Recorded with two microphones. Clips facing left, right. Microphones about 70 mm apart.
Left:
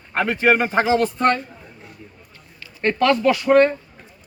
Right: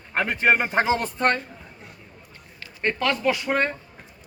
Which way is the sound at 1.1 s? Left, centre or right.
Right.